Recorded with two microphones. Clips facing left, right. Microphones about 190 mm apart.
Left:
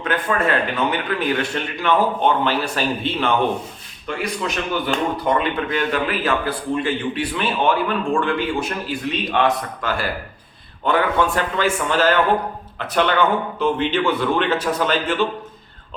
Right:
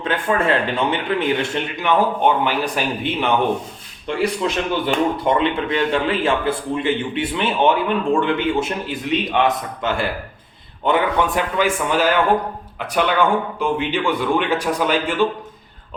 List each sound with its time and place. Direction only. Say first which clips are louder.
0.0 s speech: right 1 dB; 30° right (ahead or behind)
4.0 s a man's voice: right 4 dB; 30° right (ahead or behind); by 15.3 s 15° right (ahead or behind)